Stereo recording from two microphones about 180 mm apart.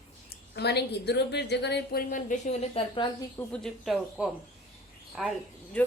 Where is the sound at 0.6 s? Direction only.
65° left (ahead or behind).